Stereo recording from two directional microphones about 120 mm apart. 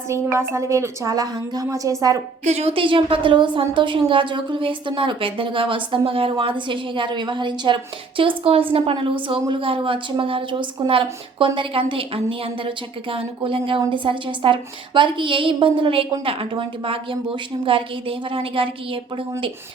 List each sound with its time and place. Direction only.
0.1 s a woman's voice: 25° right (ahead or behind)
2.4 s a woman's voice: 60° right (ahead or behind); by 19.2 s 45° right (ahead or behind)